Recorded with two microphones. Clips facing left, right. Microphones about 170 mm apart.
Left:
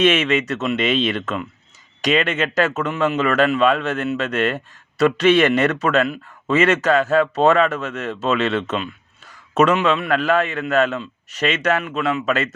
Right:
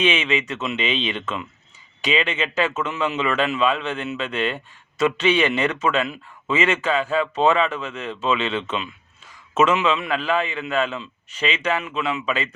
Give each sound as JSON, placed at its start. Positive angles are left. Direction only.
{"t": 0.0, "sound": "a man's voice", "side_deg": 40}